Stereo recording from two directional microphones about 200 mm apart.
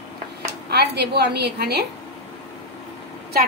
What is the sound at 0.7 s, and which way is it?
A woman's voice, 55° right (ahead or behind).